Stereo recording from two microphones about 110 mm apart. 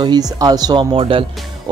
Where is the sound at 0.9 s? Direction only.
55° right (ahead or behind).